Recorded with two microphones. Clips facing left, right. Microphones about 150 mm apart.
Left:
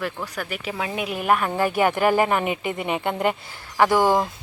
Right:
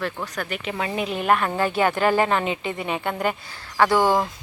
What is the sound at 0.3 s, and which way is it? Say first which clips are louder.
Speech: right 1 dB; 10° left (ahead or behind).